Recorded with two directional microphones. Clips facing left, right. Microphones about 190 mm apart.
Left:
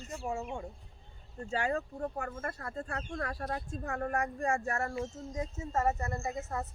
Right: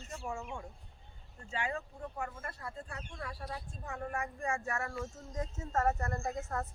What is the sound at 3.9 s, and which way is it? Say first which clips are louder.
Speech: left 5 dB; 60° left (ahead or behind).